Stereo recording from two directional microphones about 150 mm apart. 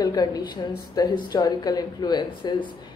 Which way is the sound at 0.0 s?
25° left (ahead or behind).